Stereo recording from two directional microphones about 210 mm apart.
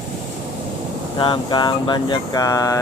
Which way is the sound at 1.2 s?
20° left (ahead or behind).